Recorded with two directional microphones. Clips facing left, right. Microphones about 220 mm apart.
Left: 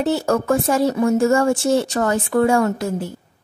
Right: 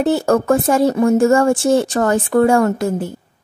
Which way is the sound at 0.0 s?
50° right (ahead or behind).